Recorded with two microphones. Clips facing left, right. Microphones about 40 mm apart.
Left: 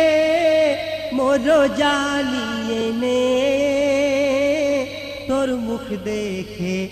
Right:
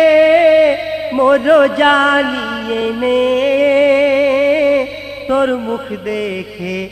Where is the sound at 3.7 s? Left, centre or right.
Right.